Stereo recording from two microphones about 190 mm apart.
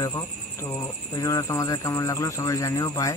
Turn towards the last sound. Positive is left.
turn(degrees=20)  # may be behind; listen again after turning